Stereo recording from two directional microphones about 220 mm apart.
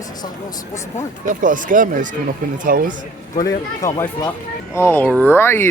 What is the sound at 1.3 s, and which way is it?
Speech, 35° right (ahead or behind).